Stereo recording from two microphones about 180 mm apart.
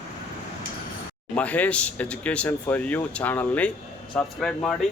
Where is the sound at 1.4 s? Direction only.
10° left (ahead or behind).